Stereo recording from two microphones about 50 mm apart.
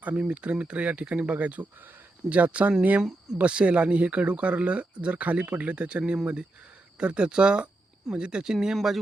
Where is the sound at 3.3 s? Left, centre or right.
Right.